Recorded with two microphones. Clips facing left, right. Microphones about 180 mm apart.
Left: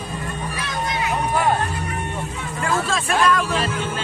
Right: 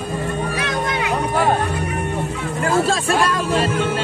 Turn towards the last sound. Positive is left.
turn(degrees=-30)  # may be behind; listen again after turning